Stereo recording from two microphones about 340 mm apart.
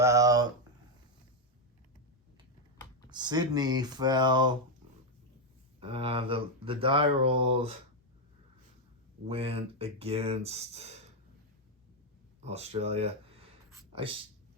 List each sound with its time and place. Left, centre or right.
0.0 s a sound: centre
3.1 s speech: centre
5.8 s speech: centre
9.3 s speech: centre
12.4 s speech: centre
13.7 s a sound: centre